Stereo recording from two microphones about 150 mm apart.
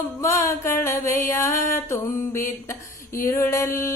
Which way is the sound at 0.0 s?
20° left (ahead or behind).